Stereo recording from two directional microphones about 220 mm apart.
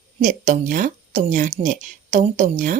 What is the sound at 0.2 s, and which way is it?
A woman's voice, 35° right (ahead or behind).